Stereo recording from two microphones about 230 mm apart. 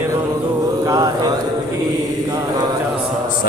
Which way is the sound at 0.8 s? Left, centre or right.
Centre.